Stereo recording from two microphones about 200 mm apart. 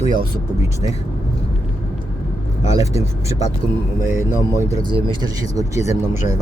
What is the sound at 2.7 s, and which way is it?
Speech, 15° right (ahead or behind).